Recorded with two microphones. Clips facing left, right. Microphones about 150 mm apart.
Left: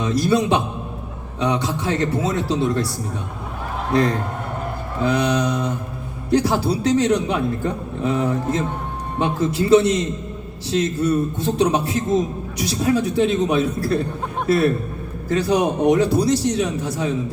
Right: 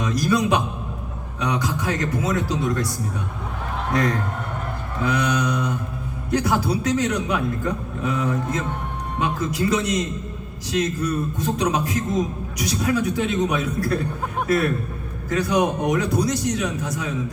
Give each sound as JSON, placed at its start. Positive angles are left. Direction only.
{"t": 0.0, "sound": "a man's voice", "side_deg": 30}
{"t": 3.9, "sound": "a man's voice", "side_deg": 30}